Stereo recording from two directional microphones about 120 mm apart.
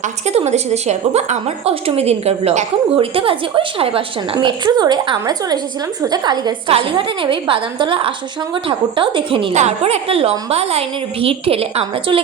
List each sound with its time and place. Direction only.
0.0 s a woman's voice: 65° right (ahead or behind); by 6.5 s 35° right (ahead or behind)
6.7 s a woman's voice: 50° right (ahead or behind)
9.5 s a woman's voice: 65° right (ahead or behind)